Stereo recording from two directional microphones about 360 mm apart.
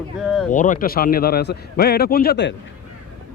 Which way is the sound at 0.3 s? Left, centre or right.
Centre.